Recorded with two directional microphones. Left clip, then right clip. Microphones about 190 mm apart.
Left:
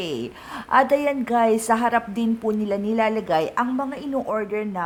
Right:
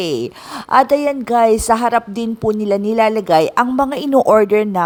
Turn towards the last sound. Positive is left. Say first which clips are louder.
# right 14 dB
turn(degrees=-45)  # may be behind; listen again after turning